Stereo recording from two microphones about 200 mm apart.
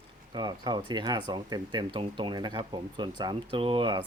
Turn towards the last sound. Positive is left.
turn(degrees=-25)  # may be behind; listen again after turning